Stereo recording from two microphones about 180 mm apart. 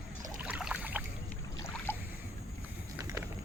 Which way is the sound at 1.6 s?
15° left (ahead or behind).